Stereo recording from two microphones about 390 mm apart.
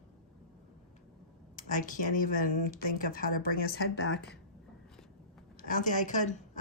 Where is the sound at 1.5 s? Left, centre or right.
Left.